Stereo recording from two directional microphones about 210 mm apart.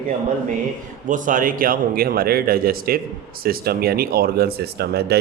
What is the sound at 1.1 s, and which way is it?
Speech, 40° right (ahead or behind).